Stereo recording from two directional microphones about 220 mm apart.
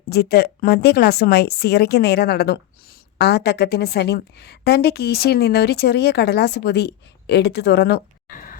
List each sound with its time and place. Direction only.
0.1 s a woman's voice: 45° left (ahead or behind)